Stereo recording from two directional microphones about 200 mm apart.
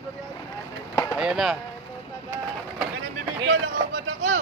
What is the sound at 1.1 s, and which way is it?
Speech, 5° right (ahead or behind).